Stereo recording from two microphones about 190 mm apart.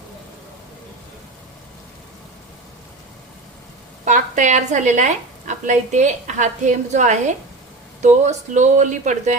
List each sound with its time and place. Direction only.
4.0 s speech: 40° right (ahead or behind)